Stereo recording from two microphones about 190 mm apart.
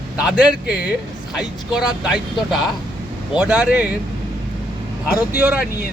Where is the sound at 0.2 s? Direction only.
5° right (ahead or behind).